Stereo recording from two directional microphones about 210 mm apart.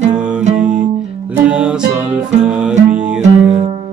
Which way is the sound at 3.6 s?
25° right (ahead or behind).